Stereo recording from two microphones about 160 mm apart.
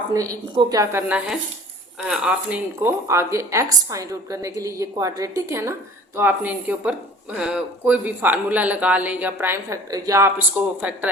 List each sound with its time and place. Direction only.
0.1 s a woman's voice: 20° right (ahead or behind)
1.0 s a woman's voice: 10° right (ahead or behind)
2.8 s a woman's voice: 15° right (ahead or behind)